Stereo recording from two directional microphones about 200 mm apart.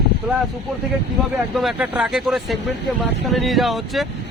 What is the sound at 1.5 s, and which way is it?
Speech, centre (ahead or behind).